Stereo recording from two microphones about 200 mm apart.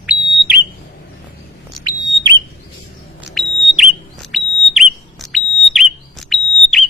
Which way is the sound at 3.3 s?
Centre (ahead or behind).